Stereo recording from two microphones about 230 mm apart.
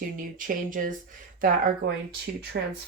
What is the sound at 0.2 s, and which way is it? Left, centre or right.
Speech, right.